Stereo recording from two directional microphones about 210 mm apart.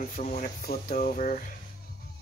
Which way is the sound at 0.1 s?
35° left (ahead or behind).